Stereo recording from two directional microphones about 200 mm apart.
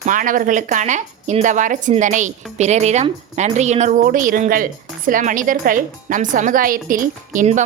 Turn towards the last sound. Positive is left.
turn(degrees=-40)  # may be behind; listen again after turning